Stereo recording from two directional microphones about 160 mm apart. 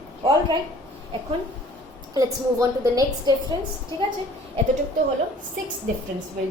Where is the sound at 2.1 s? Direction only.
20° right (ahead or behind).